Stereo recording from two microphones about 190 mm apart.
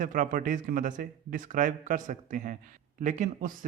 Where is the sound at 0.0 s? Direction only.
45° right (ahead or behind).